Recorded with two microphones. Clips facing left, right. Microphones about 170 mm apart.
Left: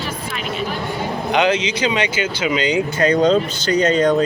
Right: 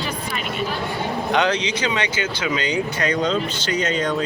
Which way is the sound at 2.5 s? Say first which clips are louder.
Left 5 dB; 30° left (ahead or behind).